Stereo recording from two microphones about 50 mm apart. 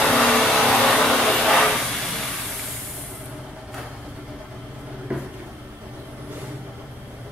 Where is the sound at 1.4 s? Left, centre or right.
Centre.